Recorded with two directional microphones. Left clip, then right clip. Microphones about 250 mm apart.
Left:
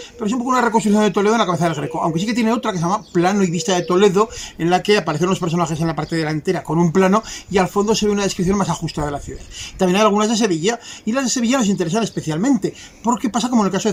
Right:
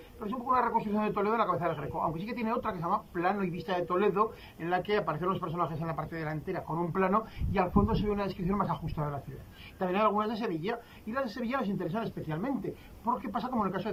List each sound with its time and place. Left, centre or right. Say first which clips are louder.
0.2 s a man's voice: left 11 dB; centre